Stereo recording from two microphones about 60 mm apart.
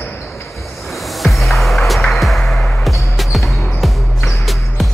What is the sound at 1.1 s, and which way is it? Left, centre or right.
Music, centre.